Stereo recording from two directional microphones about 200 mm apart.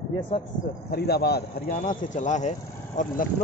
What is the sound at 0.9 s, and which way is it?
A man's voice, 50° left (ahead or behind).